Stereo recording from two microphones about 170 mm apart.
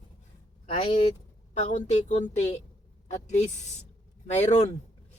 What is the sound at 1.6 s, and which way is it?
Speech, 45° left (ahead or behind).